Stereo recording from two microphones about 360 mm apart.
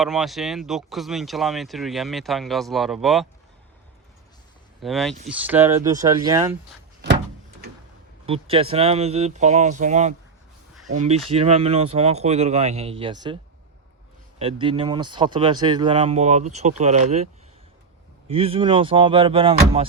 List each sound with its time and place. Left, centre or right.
0.0 s speech: centre
4.8 s speech: centre
8.3 s speech: centre
18.3 s speech: centre